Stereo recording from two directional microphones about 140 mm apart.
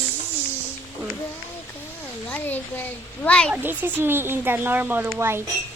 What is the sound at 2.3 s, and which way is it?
A child's voice, 15° left (ahead or behind).